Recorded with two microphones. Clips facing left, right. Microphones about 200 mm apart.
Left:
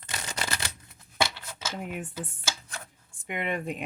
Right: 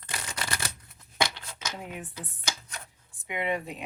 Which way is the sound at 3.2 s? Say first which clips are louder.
Even; 50° left (ahead or behind).